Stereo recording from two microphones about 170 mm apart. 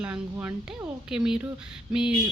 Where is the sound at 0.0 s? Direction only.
10° right (ahead or behind).